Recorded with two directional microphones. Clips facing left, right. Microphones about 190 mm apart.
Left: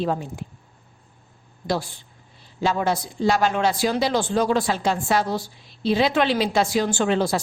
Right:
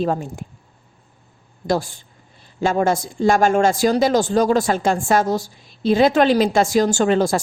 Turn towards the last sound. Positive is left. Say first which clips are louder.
# right 4 dB
turn(degrees=-45)  # may be behind; listen again after turning